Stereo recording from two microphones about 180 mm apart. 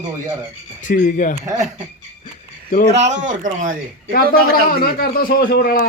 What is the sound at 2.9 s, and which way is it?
Speech, 40° right (ahead or behind).